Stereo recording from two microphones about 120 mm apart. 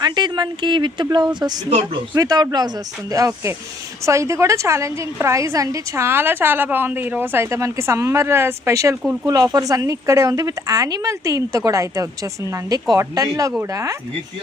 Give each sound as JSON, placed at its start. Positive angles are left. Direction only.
{"t": 0.0, "sound": "a woman's voice", "side_deg": -40}